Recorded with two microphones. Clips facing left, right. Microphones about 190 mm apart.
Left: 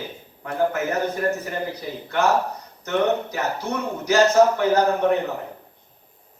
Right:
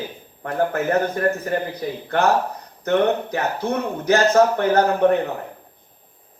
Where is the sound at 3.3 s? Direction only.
55° right (ahead or behind).